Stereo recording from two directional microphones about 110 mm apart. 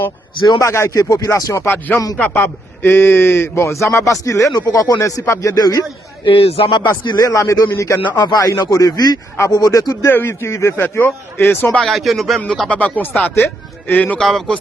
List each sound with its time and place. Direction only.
0.3 s speech: 45° left (ahead or behind)
0.6 s speech: 30° left (ahead or behind)
1.6 s a man's voice: 20° left (ahead or behind); by 5.8 s 35° left (ahead or behind)
6.2 s a man's voice: 60° left (ahead or behind)
6.7 s speech: 45° left (ahead or behind)
7.2 s a man's voice: 30° left (ahead or behind)
11.8 s a man's voice: centre (ahead or behind)